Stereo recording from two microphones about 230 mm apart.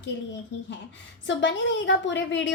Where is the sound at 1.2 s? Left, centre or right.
Left.